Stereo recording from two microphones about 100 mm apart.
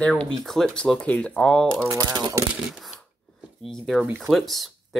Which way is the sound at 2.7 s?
5° right (ahead or behind).